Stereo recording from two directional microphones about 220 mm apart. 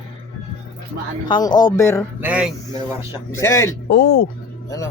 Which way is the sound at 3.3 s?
15° left (ahead or behind).